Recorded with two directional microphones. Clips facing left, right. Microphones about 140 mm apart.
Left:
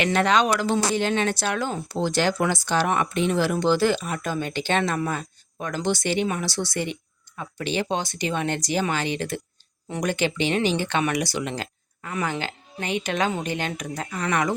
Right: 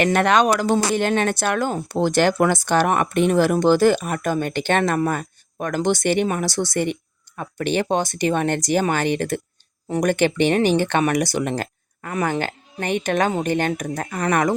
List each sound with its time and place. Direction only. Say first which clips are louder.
0.0 s speech: right 4 dB; 55° right (ahead or behind)